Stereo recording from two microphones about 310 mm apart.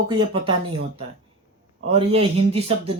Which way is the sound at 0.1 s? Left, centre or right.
Centre.